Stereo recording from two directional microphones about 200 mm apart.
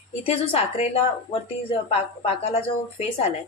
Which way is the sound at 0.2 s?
30° left (ahead or behind).